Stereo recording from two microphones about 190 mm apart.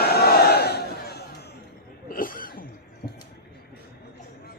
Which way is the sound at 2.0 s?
45° left (ahead or behind).